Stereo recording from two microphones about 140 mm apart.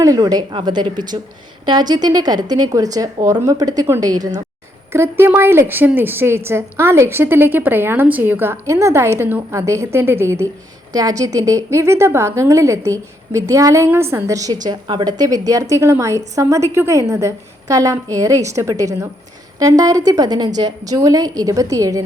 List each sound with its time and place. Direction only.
0.0 s a woman's voice: 25° right (ahead or behind)